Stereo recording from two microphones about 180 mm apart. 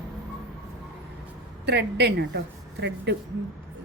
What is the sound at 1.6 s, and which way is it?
Speech, 70° right (ahead or behind).